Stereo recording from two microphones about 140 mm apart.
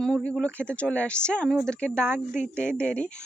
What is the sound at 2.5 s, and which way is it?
Speech, 15° right (ahead or behind).